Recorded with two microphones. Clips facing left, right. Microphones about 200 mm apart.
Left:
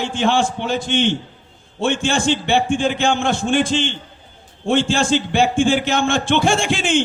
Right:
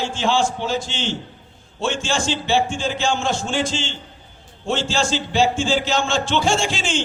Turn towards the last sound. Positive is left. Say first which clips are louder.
# left 3 dB
turn(degrees=55)  # may be behind; listen again after turning